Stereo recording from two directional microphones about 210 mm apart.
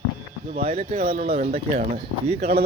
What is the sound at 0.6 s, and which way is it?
Speech, 30° right (ahead or behind).